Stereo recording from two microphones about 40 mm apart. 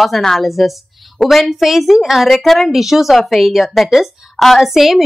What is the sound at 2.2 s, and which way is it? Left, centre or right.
Speech, centre.